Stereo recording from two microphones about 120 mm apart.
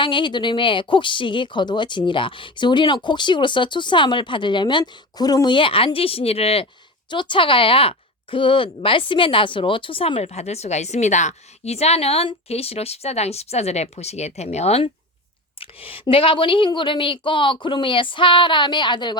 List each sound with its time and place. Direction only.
0.0 s speech: 40° left (ahead or behind)
7.1 s speech: 40° left (ahead or behind); by 14.8 s 60° left (ahead or behind)
15.6 s speech: 50° left (ahead or behind)